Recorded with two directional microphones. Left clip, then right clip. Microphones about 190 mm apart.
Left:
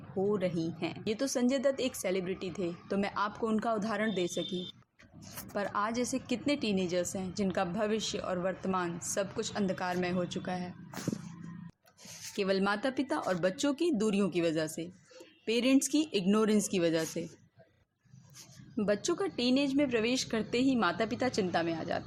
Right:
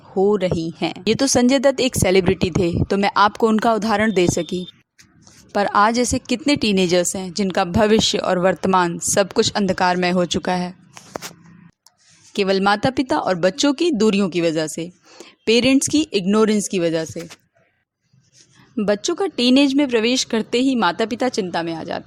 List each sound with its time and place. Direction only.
0.2 s speech: 45° right (ahead or behind)
5.5 s speech: 50° right (ahead or behind)
12.3 s speech: 45° right (ahead or behind)
18.8 s speech: 40° right (ahead or behind)